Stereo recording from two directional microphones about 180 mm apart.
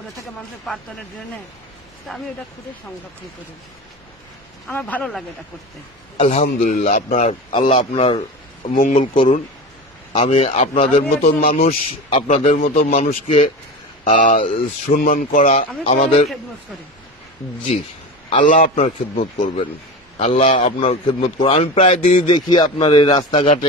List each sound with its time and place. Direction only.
2.1 s speech: centre (ahead or behind)
4.6 s speech: 10° left (ahead or behind)
6.1 s a man's voice: 40° left (ahead or behind)
8.7 s speech: 45° left (ahead or behind)
10.1 s a man's voice: 30° left (ahead or behind)
18.4 s a man's voice: 40° left (ahead or behind)